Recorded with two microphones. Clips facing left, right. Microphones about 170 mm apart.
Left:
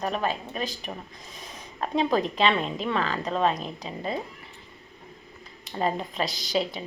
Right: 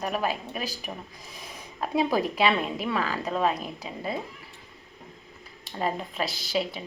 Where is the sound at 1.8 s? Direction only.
5° right (ahead or behind).